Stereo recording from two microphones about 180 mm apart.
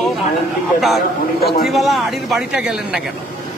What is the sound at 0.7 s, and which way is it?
A man's voice, centre (ahead or behind).